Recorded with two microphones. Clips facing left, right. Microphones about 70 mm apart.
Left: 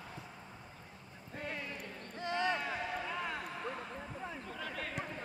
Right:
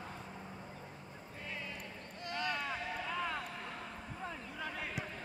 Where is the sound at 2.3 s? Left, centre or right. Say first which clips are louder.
Left 4 dB; left.